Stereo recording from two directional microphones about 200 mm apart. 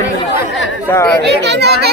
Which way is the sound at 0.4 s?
65° left (ahead or behind).